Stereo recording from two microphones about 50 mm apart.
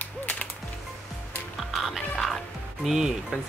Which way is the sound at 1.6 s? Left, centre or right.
Centre.